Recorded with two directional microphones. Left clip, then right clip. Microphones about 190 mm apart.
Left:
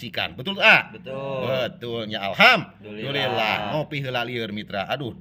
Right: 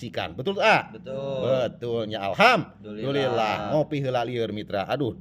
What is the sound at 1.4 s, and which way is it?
Speech, 35° right (ahead or behind).